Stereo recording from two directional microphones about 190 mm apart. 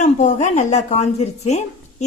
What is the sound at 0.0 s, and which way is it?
Speech, 40° left (ahead or behind).